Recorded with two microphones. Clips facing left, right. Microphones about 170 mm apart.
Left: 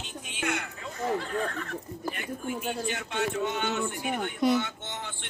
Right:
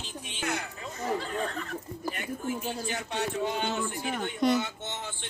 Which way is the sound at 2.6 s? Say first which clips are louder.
Left 2 dB; 35° right (ahead or behind).